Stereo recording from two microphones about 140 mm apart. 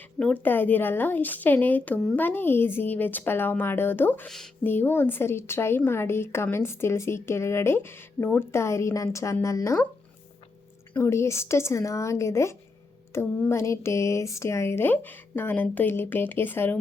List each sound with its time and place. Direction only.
0.2 s speech: 10° left (ahead or behind)
10.9 s speech: 20° left (ahead or behind)